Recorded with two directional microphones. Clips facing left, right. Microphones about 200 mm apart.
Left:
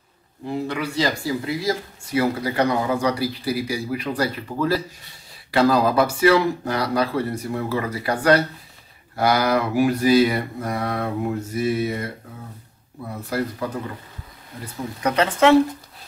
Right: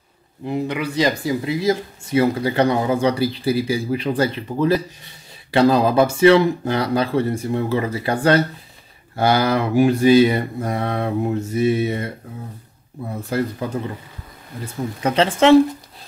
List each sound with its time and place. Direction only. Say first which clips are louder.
0.5 s speech: right 3 dB; 20° right (ahead or behind)
14.6 s speech: right 2 dB; 25° right (ahead or behind)